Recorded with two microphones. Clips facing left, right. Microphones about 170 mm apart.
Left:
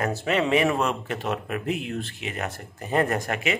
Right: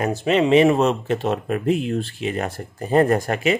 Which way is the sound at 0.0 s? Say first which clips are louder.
Right 5 dB; 20° right (ahead or behind).